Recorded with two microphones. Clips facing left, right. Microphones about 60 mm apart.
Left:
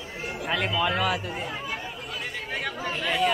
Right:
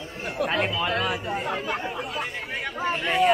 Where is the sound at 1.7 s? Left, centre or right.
Right.